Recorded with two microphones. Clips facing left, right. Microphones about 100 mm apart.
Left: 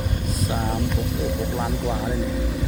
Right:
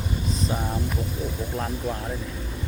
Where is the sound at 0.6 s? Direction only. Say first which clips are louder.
Left 4 dB; 65° left (ahead or behind).